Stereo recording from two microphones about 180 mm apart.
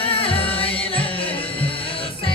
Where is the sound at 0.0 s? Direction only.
30° left (ahead or behind).